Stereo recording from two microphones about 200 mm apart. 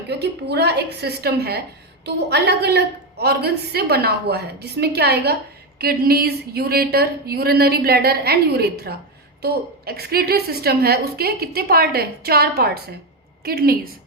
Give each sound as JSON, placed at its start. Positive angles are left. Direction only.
{"t": 0.1, "sound": "a woman's voice", "side_deg": -55}